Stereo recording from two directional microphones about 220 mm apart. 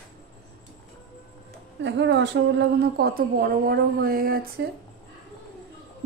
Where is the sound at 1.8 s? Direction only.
55° right (ahead or behind).